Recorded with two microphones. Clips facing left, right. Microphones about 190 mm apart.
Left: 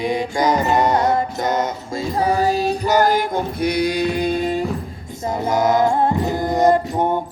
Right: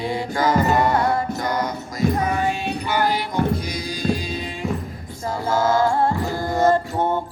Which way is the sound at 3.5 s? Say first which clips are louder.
Left 7 dB; 65° left (ahead or behind).